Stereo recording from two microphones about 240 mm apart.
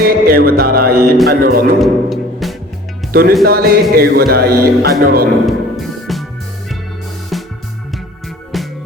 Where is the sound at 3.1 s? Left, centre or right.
Right.